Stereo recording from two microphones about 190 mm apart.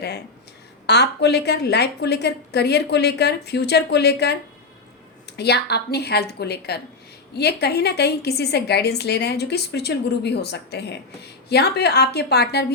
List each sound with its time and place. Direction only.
0.9 s a woman's voice: 60° left (ahead or behind)
5.4 s a woman's voice: 60° left (ahead or behind)